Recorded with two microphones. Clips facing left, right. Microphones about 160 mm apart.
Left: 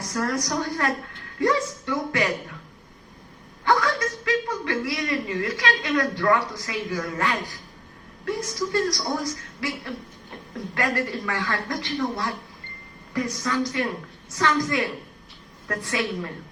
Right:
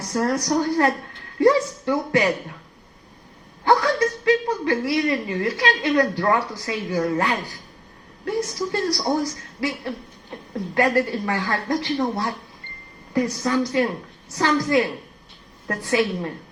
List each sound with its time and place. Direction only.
0.1 s a woman's voice: 30° right (ahead or behind)
3.6 s a woman's voice: 30° right (ahead or behind)